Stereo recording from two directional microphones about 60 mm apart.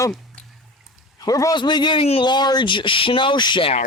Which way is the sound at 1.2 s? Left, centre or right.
Left.